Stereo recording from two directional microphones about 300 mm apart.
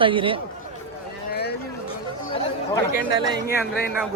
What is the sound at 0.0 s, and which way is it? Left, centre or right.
Speech, centre.